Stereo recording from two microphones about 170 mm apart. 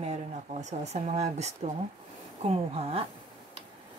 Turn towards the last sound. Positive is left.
turn(degrees=-35)  # may be behind; listen again after turning